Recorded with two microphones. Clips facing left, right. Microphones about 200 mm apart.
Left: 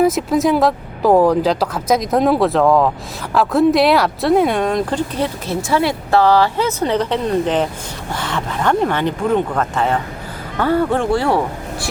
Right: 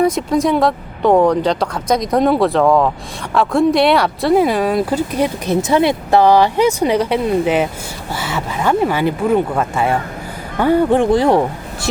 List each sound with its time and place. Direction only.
0.0 s speech: 5° left (ahead or behind); by 11.9 s 20° right (ahead or behind)